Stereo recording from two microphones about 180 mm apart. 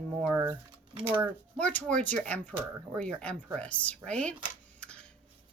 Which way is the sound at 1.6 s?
5° left (ahead or behind).